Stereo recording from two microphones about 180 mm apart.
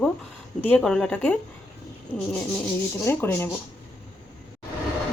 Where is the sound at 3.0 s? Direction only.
10° left (ahead or behind).